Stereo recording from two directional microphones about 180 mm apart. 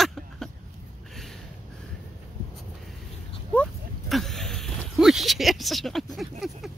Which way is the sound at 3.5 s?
5° left (ahead or behind).